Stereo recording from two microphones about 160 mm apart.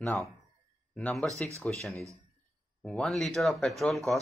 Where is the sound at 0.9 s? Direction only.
5° left (ahead or behind).